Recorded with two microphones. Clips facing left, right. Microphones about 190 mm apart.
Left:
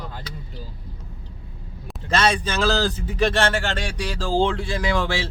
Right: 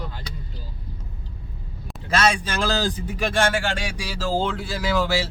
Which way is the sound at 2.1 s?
10° right (ahead or behind).